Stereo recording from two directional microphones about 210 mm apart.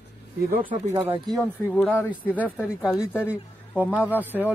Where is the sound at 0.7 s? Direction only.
35° right (ahead or behind).